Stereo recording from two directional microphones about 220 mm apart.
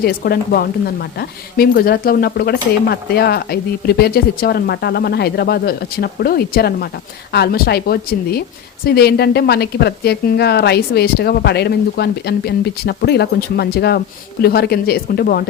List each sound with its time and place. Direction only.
0.0 s a woman's voice: 45° left (ahead or behind)